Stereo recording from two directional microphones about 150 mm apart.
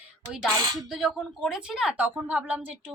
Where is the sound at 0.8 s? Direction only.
Centre (ahead or behind).